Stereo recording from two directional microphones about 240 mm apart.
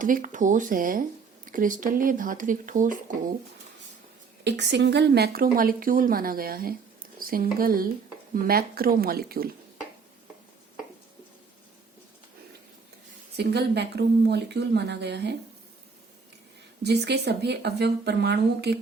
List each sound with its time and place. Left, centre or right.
0.0 s speech: right
4.4 s speech: right
13.3 s speech: right
16.8 s speech: right